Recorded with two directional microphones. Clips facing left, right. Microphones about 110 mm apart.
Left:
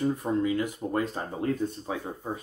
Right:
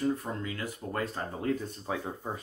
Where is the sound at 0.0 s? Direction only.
15° left (ahead or behind).